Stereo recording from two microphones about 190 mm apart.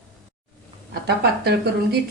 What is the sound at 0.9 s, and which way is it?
Speech, 55° right (ahead or behind).